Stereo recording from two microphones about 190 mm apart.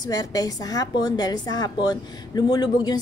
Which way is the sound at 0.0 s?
20° left (ahead or behind).